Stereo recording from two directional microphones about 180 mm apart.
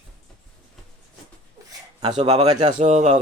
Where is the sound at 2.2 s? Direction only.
40° right (ahead or behind).